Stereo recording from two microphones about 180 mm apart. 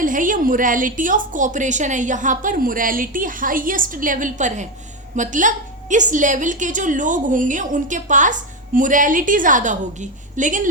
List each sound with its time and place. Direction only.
0.0 s a woman's voice: 50° right (ahead or behind)